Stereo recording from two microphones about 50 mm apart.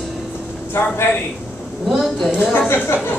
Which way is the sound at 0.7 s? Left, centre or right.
Left.